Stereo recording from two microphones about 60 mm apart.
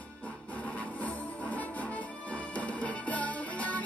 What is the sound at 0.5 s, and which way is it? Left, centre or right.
Music, left.